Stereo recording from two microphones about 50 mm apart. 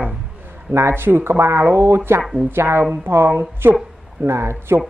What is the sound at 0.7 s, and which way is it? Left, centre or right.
A woman's voice, right.